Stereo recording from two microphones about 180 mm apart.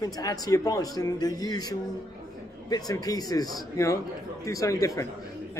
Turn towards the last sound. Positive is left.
turn(degrees=15)  # may be behind; listen again after turning